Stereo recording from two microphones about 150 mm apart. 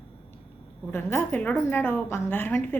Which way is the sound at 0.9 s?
15° left (ahead or behind).